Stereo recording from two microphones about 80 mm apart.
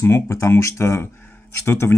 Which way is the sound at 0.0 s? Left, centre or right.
Left.